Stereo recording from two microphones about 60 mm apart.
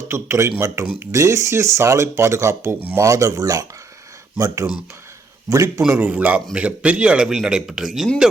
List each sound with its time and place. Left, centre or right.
0.1 s speech: right
3.0 s speech: right
5.5 s a man's voice: right
6.0 s a man's voice: right; by 8.1 s centre